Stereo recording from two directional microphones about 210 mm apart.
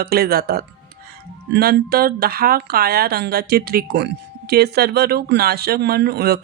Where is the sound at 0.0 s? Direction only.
45° right (ahead or behind).